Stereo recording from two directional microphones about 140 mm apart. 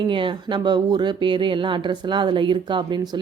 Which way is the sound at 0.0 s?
35° right (ahead or behind).